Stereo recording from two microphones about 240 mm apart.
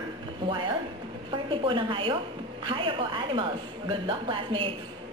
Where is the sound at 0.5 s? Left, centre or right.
Centre.